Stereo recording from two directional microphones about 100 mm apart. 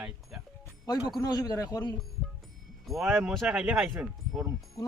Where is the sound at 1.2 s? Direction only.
40° left (ahead or behind).